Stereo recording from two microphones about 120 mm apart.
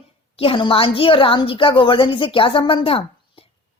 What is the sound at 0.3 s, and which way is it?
A woman's voice, 50° left (ahead or behind).